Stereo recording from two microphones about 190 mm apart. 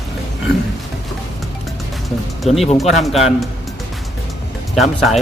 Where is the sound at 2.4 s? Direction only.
Centre (ahead or behind).